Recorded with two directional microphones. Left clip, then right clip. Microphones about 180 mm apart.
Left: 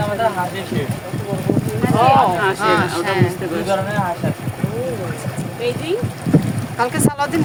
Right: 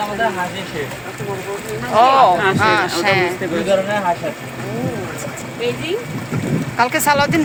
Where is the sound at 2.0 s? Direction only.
15° right (ahead or behind).